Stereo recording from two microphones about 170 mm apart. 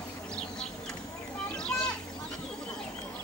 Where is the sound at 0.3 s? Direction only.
5° left (ahead or behind).